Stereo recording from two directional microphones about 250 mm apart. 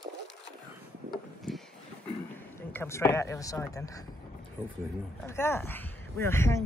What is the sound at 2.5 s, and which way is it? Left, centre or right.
A man's voice, centre.